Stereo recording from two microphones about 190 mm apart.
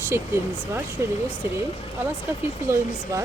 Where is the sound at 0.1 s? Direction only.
15° right (ahead or behind).